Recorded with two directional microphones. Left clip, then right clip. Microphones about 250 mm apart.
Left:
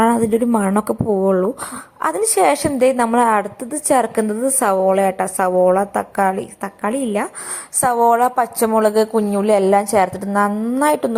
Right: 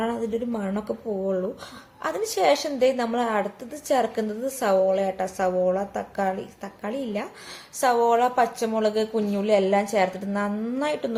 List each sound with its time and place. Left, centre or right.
0.0 s a woman's voice: left